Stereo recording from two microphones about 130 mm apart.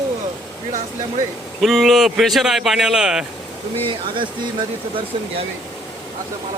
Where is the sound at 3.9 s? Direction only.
40° right (ahead or behind).